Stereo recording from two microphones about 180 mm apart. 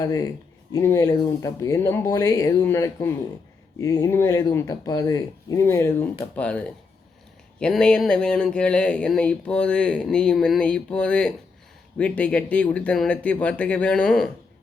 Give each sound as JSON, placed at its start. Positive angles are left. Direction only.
{"t": 0.0, "sound": "speech", "side_deg": 20}